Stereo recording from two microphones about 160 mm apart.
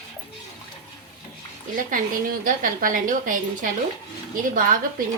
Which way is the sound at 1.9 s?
55° right (ahead or behind).